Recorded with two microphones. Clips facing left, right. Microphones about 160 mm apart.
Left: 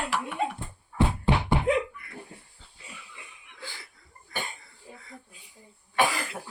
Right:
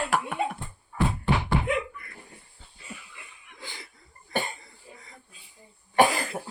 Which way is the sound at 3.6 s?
20° right (ahead or behind).